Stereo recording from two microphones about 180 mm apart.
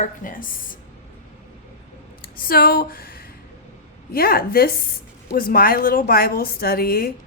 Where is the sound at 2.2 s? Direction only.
55° left (ahead or behind).